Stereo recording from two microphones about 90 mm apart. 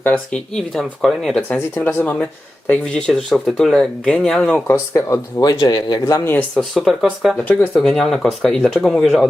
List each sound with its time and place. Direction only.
0.0 s speech: 10° left (ahead or behind)
1.5 s speech: 25° left (ahead or behind)
3.1 s speech: centre (ahead or behind)
4.7 s speech: 30° left (ahead or behind)
5.4 s speech: 50° left (ahead or behind)
6.1 s speech: 25° left (ahead or behind)
6.6 s speech: centre (ahead or behind)
7.3 s speech: 20° left (ahead or behind)
7.8 s speech: 5° left (ahead or behind)